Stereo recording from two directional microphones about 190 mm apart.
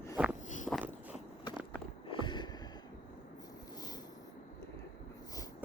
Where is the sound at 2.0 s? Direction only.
25° left (ahead or behind).